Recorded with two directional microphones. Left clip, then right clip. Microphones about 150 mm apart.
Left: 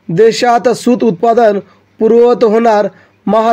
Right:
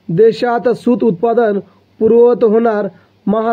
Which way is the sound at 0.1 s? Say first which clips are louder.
Left 3 dB; 40° left (ahead or behind).